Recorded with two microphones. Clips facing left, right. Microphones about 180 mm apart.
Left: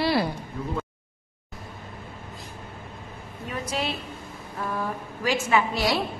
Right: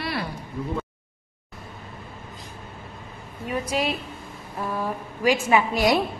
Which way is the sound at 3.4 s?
10° right (ahead or behind).